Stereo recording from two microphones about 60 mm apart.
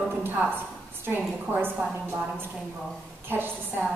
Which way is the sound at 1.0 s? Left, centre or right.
Right.